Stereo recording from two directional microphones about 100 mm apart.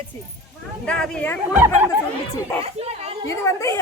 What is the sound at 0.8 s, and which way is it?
Speech, 10° left (ahead or behind).